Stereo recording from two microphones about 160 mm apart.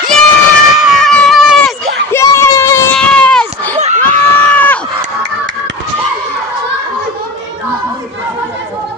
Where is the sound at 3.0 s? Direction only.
5° left (ahead or behind).